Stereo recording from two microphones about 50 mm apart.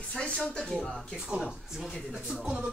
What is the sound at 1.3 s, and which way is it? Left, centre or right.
Speech, right.